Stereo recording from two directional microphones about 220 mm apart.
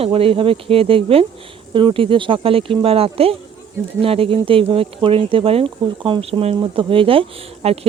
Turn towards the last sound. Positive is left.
turn(degrees=-25)  # may be behind; listen again after turning